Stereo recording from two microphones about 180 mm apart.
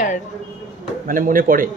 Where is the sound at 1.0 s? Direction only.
50° right (ahead or behind).